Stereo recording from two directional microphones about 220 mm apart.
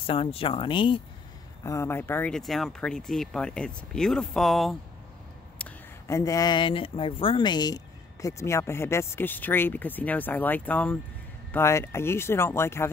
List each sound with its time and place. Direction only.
0.0 s speech: 25° left (ahead or behind); by 4.7 s centre (ahead or behind)
5.6 s speech: 15° left (ahead or behind)